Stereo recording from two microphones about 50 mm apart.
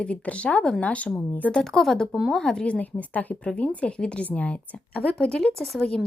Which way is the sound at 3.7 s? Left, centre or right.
Left.